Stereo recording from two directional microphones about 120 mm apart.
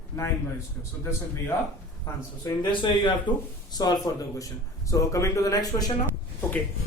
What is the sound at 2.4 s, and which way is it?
Speech, 40° left (ahead or behind).